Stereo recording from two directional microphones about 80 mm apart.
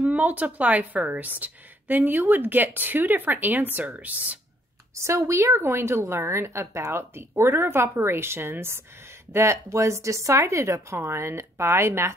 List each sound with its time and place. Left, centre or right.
0.0 s a woman's voice: centre
4.9 s a woman's voice: right